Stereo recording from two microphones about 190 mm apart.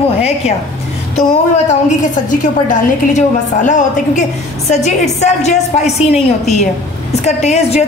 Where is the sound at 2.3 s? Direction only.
40° left (ahead or behind).